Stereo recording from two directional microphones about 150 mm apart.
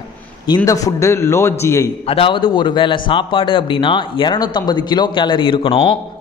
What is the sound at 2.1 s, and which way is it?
A man's voice, 35° left (ahead or behind).